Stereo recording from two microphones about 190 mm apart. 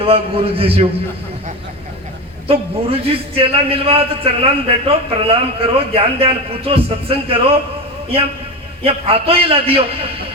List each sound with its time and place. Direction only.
0.0 s a man's voice: 30° right (ahead or behind)
2.5 s a man's voice: 30° right (ahead or behind)
8.8 s a man's voice: 30° right (ahead or behind)